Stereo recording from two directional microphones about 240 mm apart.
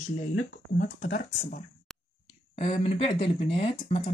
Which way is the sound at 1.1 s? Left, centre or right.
Left.